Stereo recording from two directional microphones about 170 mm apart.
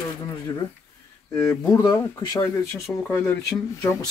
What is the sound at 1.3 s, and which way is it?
Speech, 20° left (ahead or behind).